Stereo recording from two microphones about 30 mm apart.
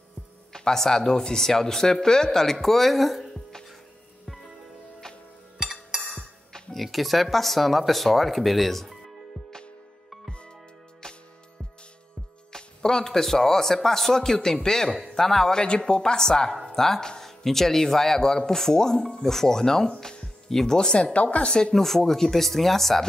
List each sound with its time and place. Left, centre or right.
0.5 s speech: left; by 3.3 s centre
5.6 s music: centre
6.0 s music: centre
6.7 s speech: centre
12.5 s speech: centre
15.4 s speech: left
20.0 s music: left
20.4 s speech: centre
21.1 s speech: left
21.7 s speech: centre